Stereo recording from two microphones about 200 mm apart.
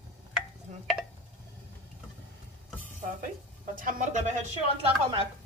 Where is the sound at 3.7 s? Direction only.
40° right (ahead or behind).